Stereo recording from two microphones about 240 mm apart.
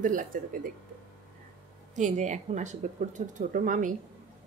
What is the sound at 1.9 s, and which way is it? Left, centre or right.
Speech, right.